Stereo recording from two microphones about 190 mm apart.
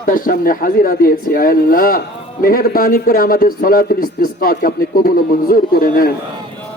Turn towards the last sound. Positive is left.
turn(degrees=50)  # may be behind; listen again after turning